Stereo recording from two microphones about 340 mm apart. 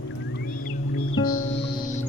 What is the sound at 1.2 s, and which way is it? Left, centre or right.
Music, left.